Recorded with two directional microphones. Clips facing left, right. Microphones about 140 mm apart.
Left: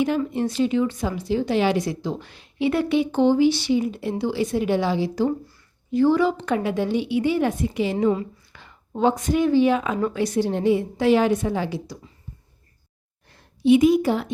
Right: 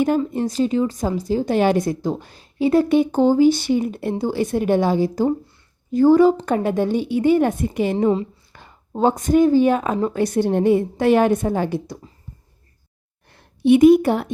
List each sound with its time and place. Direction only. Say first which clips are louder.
0.3 s speech: right 2 dB; 40° right (ahead or behind)
8.5 s a sound: right 3 dB; 45° right (ahead or behind)
9.0 s speech: right 4 dB; 45° right (ahead or behind)
13.3 s a woman's voice: right 2 dB; 60° right (ahead or behind)